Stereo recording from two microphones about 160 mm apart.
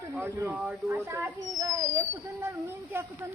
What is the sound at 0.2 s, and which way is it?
Speech, 10° right (ahead or behind).